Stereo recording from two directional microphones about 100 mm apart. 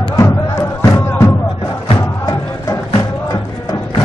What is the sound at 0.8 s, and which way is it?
Music, 30° left (ahead or behind).